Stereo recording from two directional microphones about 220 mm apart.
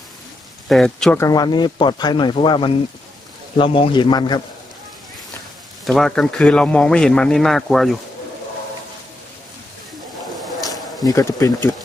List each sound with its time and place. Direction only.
0.7 s speech: centre (ahead or behind)
1.2 s speech: 15° left (ahead or behind)
5.9 s speech: centre (ahead or behind)
11.1 s speech: 15° left (ahead or behind)